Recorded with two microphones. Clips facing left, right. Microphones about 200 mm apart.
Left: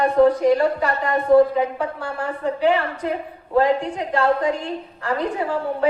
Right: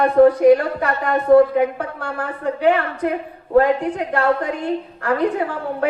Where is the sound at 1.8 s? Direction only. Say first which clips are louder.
Even; 60° right (ahead or behind).